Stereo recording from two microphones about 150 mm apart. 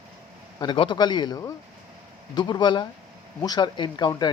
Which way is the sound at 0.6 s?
30° left (ahead or behind).